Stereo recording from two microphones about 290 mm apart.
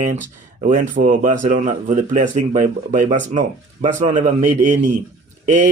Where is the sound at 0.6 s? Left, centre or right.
Right.